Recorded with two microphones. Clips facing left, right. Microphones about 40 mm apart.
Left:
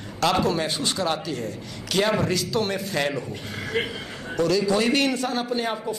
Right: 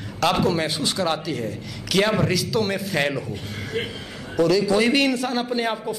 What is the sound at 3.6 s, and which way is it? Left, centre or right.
Speech, left.